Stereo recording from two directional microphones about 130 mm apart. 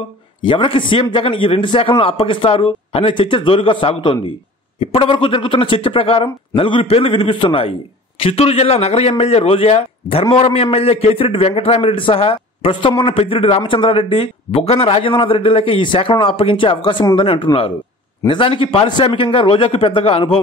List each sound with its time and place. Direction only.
0.4 s a man's voice: 40° left (ahead or behind)